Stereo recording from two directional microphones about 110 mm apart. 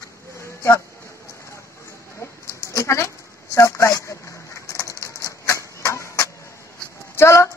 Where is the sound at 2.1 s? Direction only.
25° left (ahead or behind).